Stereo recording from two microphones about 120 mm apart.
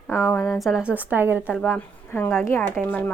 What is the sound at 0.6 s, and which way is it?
Speech, 5° right (ahead or behind).